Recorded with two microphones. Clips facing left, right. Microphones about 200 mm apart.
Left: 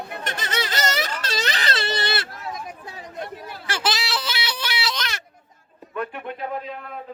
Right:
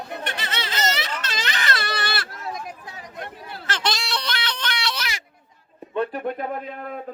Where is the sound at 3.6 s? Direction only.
5° left (ahead or behind).